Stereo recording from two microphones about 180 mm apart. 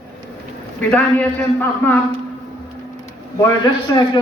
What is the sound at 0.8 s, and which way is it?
A man's voice, 10° left (ahead or behind).